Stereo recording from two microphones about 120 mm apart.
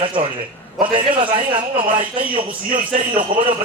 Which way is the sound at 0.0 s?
45° right (ahead or behind).